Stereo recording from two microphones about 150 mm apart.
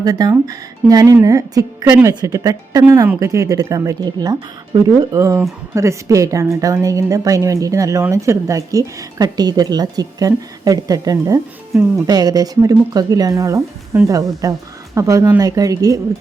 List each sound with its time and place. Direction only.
0.0 s a woman's voice: 25° right (ahead or behind)
11.7 s speech: 10° right (ahead or behind)
12.0 s a woman's voice: 25° right (ahead or behind)